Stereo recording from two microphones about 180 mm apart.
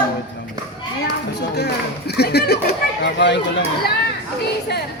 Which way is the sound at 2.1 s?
65° left (ahead or behind).